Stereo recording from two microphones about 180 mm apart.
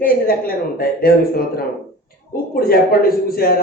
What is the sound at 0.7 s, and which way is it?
A man's voice, 55° left (ahead or behind).